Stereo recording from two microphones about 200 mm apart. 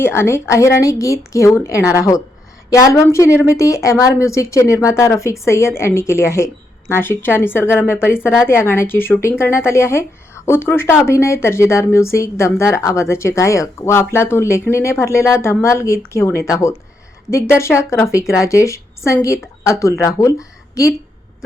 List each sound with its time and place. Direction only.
0.0 s a woman's voice: 10° left (ahead or behind)